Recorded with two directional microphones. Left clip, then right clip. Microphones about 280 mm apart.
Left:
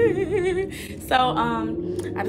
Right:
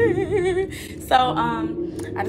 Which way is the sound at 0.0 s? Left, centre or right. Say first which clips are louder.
Right 1 dB; centre.